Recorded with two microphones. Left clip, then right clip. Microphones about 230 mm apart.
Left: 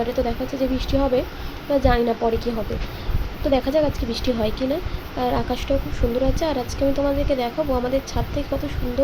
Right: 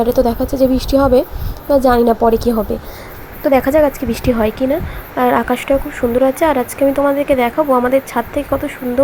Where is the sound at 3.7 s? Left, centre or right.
Centre.